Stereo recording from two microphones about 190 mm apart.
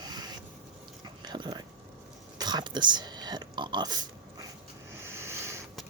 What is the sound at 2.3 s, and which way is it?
Oink, 20° right (ahead or behind).